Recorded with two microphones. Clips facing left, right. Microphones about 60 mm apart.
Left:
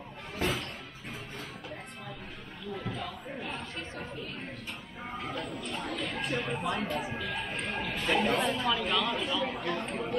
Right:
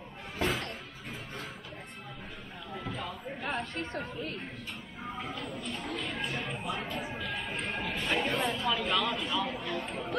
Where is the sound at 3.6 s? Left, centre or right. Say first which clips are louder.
Right 4 dB; right.